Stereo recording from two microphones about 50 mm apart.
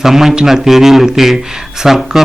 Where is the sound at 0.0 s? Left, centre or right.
Centre.